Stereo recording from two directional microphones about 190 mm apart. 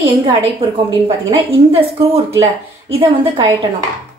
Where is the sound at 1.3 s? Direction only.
30° right (ahead or behind).